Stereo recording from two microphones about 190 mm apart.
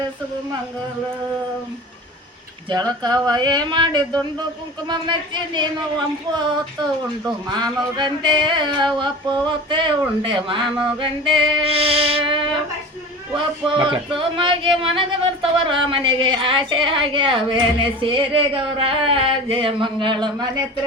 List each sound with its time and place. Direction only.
2.6 s speech: 20° right (ahead or behind)
7.5 s speech: 20° right (ahead or behind)